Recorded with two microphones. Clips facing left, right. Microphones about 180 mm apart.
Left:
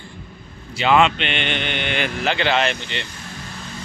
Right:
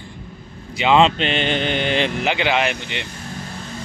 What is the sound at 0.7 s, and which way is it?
Speech, 15° right (ahead or behind).